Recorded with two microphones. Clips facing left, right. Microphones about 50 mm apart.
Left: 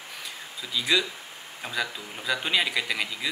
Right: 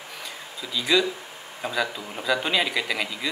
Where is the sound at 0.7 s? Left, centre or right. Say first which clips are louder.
Right 3 dB; centre.